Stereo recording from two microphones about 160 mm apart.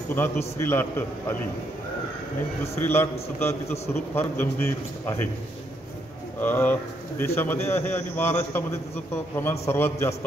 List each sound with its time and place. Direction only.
0.6 s speech: 15° left (ahead or behind)
2.8 s speech: 15° left (ahead or behind)
6.4 s speech: 10° left (ahead or behind)